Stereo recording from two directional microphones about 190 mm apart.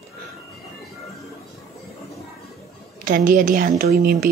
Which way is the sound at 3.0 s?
45° right (ahead or behind).